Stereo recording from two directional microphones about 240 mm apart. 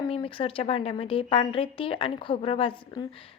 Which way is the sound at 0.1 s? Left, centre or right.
Left.